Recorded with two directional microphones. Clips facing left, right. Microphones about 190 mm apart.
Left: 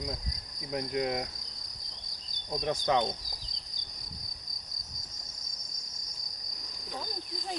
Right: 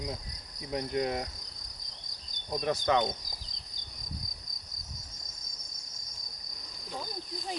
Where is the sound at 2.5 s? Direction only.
10° right (ahead or behind).